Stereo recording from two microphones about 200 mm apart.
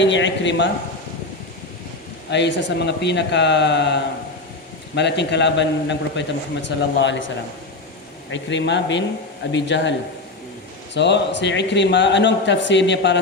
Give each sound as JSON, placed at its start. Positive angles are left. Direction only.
{"t": 0.0, "sound": "a man's voice", "side_deg": 65}
{"t": 2.3, "sound": "a man's voice", "side_deg": 60}
{"t": 8.3, "sound": "a man's voice", "side_deg": 65}
{"t": 10.9, "sound": "a man's voice", "side_deg": 60}